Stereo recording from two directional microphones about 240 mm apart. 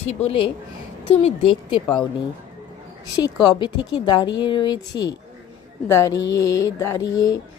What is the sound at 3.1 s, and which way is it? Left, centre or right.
Speech, centre.